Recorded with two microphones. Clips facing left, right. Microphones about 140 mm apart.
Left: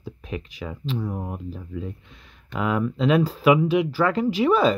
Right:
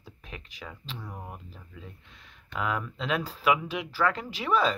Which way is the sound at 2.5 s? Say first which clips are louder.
Left 7 dB; 10° left (ahead or behind).